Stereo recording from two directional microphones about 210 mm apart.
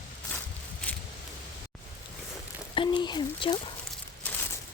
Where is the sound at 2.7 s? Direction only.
25° left (ahead or behind).